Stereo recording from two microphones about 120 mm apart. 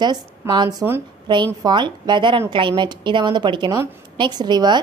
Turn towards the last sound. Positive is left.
turn(degrees=-35)  # may be behind; listen again after turning